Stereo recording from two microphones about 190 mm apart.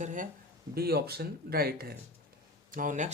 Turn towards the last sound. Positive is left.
turn(degrees=-45)  # may be behind; listen again after turning